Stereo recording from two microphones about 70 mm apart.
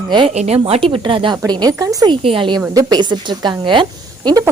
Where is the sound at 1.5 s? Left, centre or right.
Right.